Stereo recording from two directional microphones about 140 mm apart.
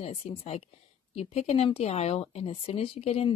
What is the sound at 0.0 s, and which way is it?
A woman's voice, 45° left (ahead or behind).